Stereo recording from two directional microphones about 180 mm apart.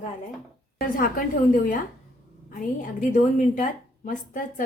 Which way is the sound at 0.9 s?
50° left (ahead or behind).